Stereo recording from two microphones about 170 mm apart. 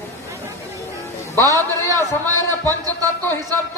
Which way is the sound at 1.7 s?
20° right (ahead or behind).